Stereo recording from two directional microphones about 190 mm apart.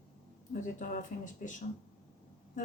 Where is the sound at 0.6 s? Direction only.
45° left (ahead or behind).